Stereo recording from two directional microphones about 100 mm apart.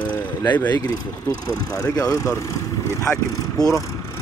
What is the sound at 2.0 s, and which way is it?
Speech, 30° left (ahead or behind).